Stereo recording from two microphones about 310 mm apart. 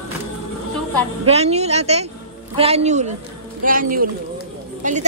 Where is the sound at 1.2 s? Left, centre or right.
Centre.